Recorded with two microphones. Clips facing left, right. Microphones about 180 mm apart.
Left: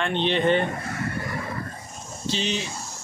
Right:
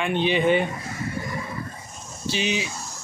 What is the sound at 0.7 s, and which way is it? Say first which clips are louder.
Bird: left 2 dB; 65° left (ahead or behind).